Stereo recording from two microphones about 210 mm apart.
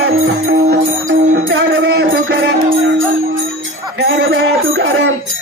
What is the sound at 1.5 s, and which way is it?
Music, 55° right (ahead or behind).